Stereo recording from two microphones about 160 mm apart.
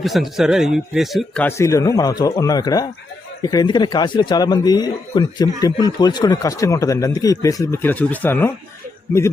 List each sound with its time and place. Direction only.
0.0 s a man's voice: centre (ahead or behind)